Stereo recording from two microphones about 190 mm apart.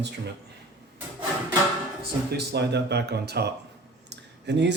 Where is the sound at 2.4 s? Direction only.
60° right (ahead or behind).